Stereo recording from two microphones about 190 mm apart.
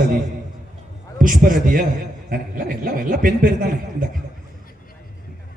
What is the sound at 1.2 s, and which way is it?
Chuckle, 45° right (ahead or behind).